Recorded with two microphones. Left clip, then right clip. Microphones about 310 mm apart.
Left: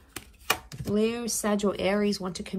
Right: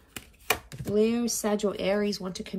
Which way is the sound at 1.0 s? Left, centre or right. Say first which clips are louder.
Right 2 dB; left.